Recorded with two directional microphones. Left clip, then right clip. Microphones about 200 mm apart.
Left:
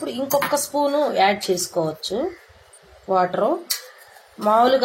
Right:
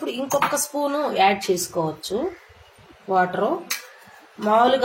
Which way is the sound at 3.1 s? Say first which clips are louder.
Left 1 dB; 25° left (ahead or behind).